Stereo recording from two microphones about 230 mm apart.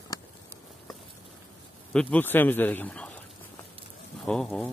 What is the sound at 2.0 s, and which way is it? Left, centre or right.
A man's voice, centre.